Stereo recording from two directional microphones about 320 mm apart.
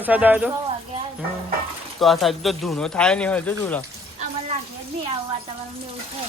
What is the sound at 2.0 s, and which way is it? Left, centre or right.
A man's voice, centre.